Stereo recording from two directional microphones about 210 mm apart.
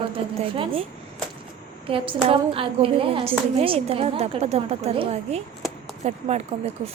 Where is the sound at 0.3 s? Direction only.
25° right (ahead or behind).